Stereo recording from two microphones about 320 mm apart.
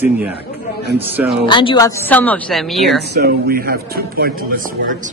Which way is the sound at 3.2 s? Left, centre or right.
Right.